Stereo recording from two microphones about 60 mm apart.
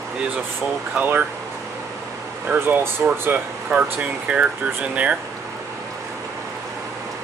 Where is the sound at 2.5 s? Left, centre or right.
Right.